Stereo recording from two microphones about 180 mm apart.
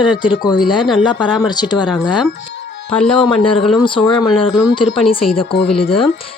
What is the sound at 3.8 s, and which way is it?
Speech, 25° left (ahead or behind).